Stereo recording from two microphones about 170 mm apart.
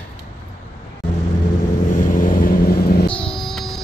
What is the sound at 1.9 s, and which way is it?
Vehicle, 50° left (ahead or behind).